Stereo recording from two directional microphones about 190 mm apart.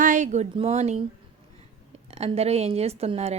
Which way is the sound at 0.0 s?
40° right (ahead or behind).